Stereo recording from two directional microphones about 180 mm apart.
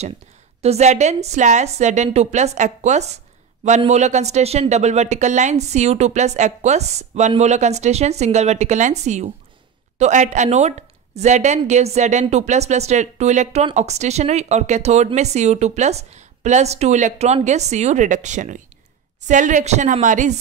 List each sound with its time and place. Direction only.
0.6 s a woman's voice: 35° right (ahead or behind)